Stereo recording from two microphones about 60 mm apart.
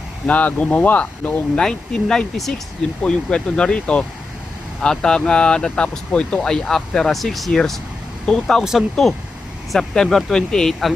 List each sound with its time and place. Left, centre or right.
0.3 s speech: left
1.5 s speech: centre